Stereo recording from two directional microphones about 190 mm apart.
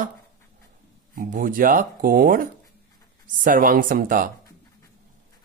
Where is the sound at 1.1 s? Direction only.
45° right (ahead or behind).